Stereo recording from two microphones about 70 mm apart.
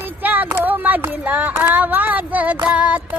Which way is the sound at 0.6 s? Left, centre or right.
Right.